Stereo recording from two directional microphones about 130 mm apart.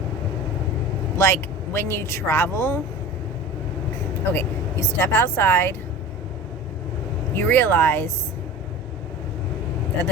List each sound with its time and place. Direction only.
1.1 s speech: 20° left (ahead or behind)
4.3 s speech: 15° left (ahead or behind)
7.3 s speech: 15° left (ahead or behind)